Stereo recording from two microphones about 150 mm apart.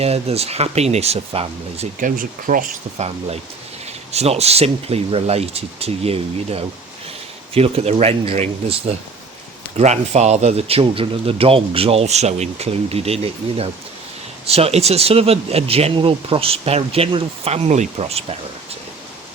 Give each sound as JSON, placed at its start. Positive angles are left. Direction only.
{"t": 0.0, "sound": "speech", "side_deg": -45}
{"t": 2.0, "sound": "speech", "side_deg": -65}
{"t": 4.1, "sound": "speech", "side_deg": -45}